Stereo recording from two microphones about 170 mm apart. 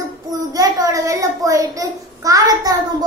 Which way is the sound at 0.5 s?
20° right (ahead or behind).